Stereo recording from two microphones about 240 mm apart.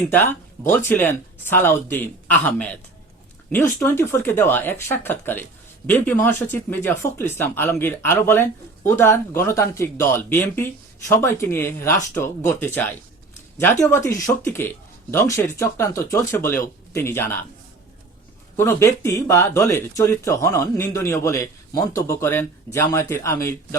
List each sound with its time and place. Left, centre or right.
0.1 s speech: centre
18.5 s speech: centre